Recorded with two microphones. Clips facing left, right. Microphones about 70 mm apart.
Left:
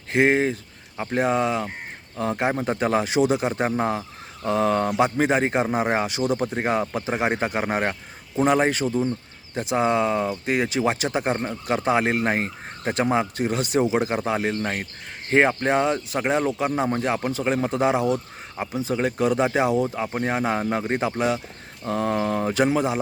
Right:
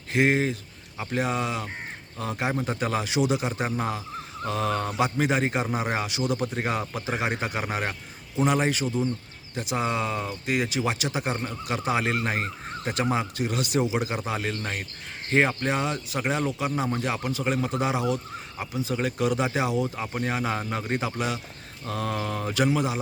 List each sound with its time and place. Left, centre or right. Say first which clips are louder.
0.1 s speech: left 3 dB; left